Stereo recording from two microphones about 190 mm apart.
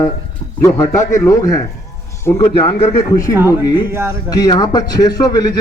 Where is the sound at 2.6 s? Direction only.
30° left (ahead or behind).